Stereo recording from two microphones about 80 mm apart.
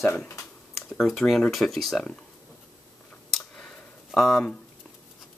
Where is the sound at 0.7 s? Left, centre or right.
Centre.